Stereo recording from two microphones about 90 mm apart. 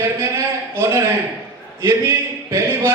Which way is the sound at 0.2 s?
30° right (ahead or behind).